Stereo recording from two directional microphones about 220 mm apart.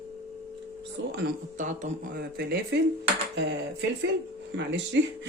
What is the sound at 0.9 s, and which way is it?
Speech, 45° right (ahead or behind).